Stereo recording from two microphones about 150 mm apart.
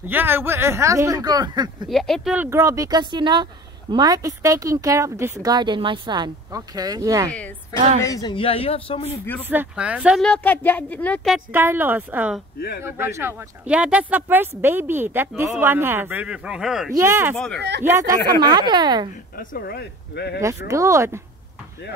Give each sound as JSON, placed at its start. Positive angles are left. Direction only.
{"t": 0.0, "sound": "speech", "side_deg": -15}
{"t": 1.9, "sound": "speech", "side_deg": 0}
{"t": 2.3, "sound": "speech", "side_deg": -15}
{"t": 8.0, "sound": "speech", "side_deg": 25}
{"t": 8.4, "sound": "a man's voice", "side_deg": 40}
{"t": 9.4, "sound": "speech", "side_deg": -15}
{"t": 10.2, "sound": "speech", "side_deg": 10}
{"t": 11.5, "sound": "speech", "side_deg": -15}
{"t": 16.9, "sound": "speech", "side_deg": -15}
{"t": 19.3, "sound": "speech", "side_deg": 85}
{"t": 20.3, "sound": "speech", "side_deg": -20}